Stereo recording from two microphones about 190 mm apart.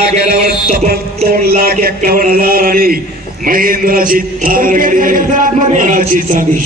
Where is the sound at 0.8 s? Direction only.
50° right (ahead or behind).